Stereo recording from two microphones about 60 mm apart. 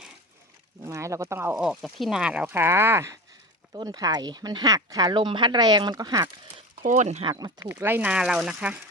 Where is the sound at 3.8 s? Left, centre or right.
Right.